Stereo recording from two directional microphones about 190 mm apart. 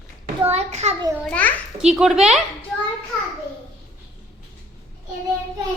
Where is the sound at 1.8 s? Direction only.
5° right (ahead or behind).